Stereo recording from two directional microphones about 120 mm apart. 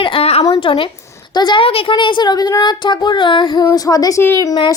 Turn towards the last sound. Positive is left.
turn(degrees=35)  # may be behind; listen again after turning